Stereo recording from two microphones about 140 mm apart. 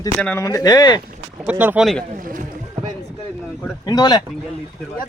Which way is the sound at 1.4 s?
10° right (ahead or behind).